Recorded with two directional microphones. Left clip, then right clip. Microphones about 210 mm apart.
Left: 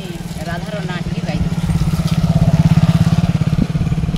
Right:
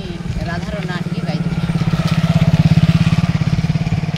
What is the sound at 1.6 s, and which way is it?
Vehicle, 30° right (ahead or behind).